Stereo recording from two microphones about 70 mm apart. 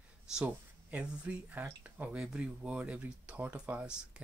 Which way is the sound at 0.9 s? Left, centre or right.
Centre.